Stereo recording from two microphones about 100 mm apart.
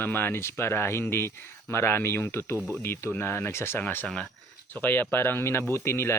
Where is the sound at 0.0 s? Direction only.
20° left (ahead or behind).